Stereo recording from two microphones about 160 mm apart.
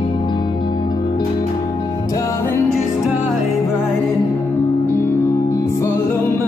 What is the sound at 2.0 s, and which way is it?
Music, 20° left (ahead or behind).